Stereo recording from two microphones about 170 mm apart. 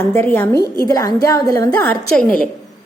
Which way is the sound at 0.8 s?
20° left (ahead or behind).